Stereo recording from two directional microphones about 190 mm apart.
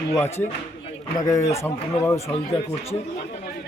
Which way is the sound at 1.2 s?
15° left (ahead or behind).